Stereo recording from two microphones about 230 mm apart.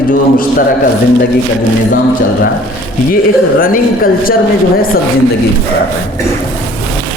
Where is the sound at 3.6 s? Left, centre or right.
Left.